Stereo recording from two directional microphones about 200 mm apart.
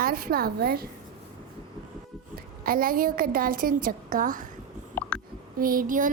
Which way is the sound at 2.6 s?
45° right (ahead or behind).